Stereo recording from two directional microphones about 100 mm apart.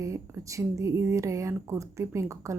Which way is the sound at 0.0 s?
30° right (ahead or behind).